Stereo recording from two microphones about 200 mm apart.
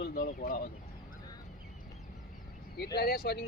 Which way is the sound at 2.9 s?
50° left (ahead or behind).